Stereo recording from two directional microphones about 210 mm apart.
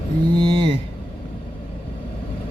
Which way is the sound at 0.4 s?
25° right (ahead or behind).